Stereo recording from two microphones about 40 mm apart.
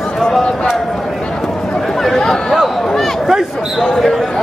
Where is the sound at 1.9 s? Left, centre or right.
Centre.